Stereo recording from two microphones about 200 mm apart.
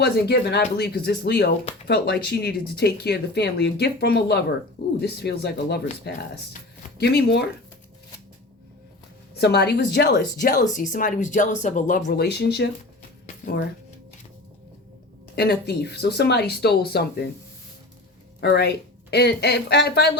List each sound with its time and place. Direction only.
0.0 s speech: 55° left (ahead or behind)
9.4 s speech: 55° left (ahead or behind)
13.2 s a sound: 45° left (ahead or behind)
15.4 s speech: 55° left (ahead or behind)
18.3 s speech: 55° left (ahead or behind)